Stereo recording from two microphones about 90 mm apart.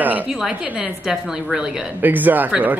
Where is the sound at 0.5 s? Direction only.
15° right (ahead or behind).